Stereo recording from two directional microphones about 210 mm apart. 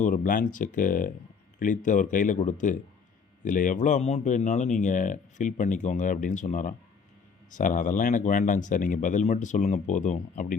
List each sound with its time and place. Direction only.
0.0 s a man's voice: 40° left (ahead or behind)